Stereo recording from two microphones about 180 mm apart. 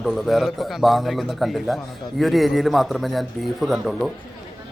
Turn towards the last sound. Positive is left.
turn(degrees=0)  # may be behind; listen again after turning